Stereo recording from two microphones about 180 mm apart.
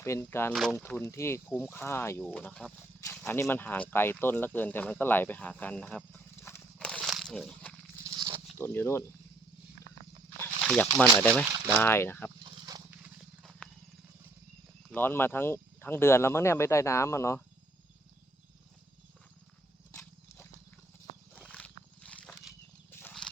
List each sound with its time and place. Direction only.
0.0 s speech: 15° left (ahead or behind)
0.5 s speech: centre (ahead or behind)
0.8 s speech: 10° left (ahead or behind)
3.0 s a sound: 15° left (ahead or behind)
3.5 s speech: 10° left (ahead or behind)
6.1 s horse: 10° left (ahead or behind)
6.7 s crumpling: centre (ahead or behind)
8.0 s wild animals: 20° right (ahead or behind)
8.5 s speech: 15° left (ahead or behind)
10.7 s speech: 5° left (ahead or behind)
12.4 s a sound: 25° right (ahead or behind)
13.0 s horse: centre (ahead or behind)
14.8 s speech: 10° left (ahead or behind)
21.3 s wild animals: 5° left (ahead or behind)